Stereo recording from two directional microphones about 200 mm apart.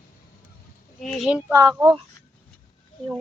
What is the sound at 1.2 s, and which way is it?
Speech, 5° right (ahead or behind).